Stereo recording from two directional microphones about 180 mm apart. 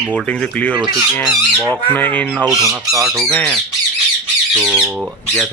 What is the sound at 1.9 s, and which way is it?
Speech, 10° left (ahead or behind).